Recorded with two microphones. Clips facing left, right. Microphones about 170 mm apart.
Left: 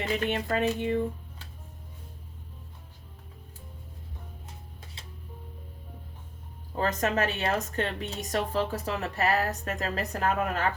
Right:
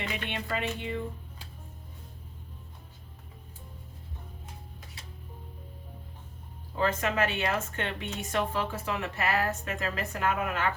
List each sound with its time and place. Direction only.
0.0 s speech: 40° left (ahead or behind)
6.7 s speech: 40° left (ahead or behind)